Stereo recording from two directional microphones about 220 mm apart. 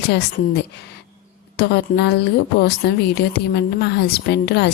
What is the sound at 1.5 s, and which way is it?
Speech, 50° left (ahead or behind).